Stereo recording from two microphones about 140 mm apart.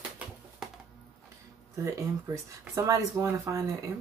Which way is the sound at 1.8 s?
20° right (ahead or behind).